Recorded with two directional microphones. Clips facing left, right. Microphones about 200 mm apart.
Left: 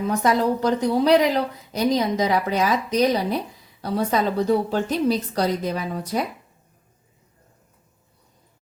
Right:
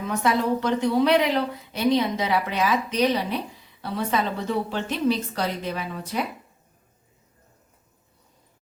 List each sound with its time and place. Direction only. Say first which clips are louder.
0.1 s a woman's voice: left 1 dB; 40° left (ahead or behind)